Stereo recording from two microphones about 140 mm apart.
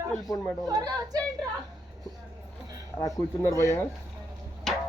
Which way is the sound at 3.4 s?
20° left (ahead or behind).